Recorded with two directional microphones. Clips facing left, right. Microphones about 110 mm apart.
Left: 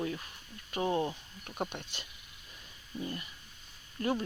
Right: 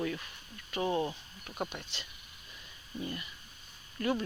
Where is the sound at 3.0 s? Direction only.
35° left (ahead or behind).